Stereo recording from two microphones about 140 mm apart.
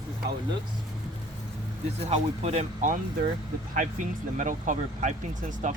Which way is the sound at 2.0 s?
50° right (ahead or behind).